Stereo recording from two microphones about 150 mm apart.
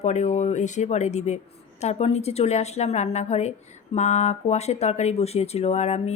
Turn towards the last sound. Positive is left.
turn(degrees=45)  # may be behind; listen again after turning